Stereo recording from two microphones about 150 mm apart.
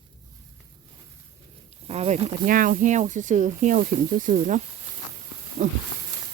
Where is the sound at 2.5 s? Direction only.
65° right (ahead or behind); by 5.7 s 50° right (ahead or behind).